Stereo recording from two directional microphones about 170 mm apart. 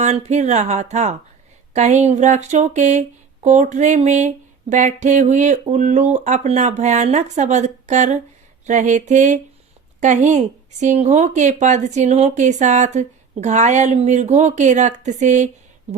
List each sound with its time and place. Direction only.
0.0 s speech: 40° right (ahead or behind)